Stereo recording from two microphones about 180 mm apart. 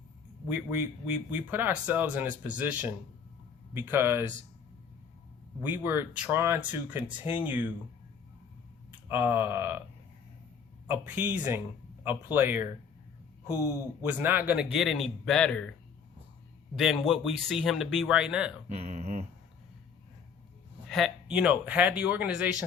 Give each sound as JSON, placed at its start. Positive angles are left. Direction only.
{"t": 0.4, "sound": "speech", "side_deg": -10}
{"t": 5.6, "sound": "speech", "side_deg": -10}
{"t": 8.9, "sound": "speech", "side_deg": -10}
{"t": 10.8, "sound": "speech", "side_deg": -10}
{"t": 14.0, "sound": "speech", "side_deg": -10}
{"t": 16.7, "sound": "speech", "side_deg": 0}
{"t": 18.7, "sound": "speech", "side_deg": -35}
{"t": 20.8, "sound": "speech", "side_deg": 0}